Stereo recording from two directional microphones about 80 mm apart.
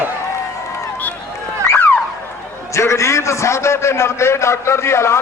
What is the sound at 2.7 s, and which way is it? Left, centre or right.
A man's voice, left.